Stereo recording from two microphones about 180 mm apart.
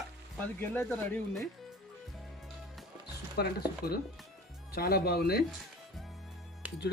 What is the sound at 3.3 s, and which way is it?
Speech, 60° left (ahead or behind).